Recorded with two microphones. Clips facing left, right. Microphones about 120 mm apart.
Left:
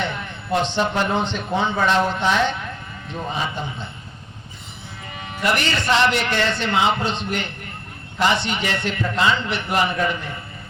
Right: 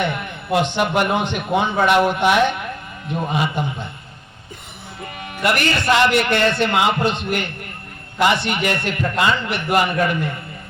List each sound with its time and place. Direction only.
0.0 s speech: 15° right (ahead or behind)
5.2 s a man's voice: 60° right (ahead or behind)